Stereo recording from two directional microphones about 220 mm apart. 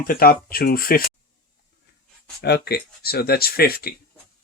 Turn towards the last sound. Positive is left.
turn(degrees=45)  # may be behind; listen again after turning